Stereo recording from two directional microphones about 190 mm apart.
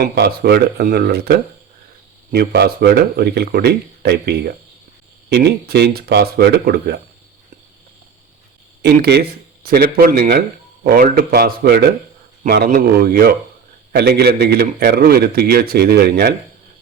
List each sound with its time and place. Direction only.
0.0 s a man's voice: 55° right (ahead or behind)
8.8 s a man's voice: 60° right (ahead or behind)